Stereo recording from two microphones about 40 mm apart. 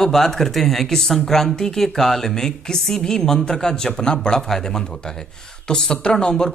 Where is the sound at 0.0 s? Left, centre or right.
Centre.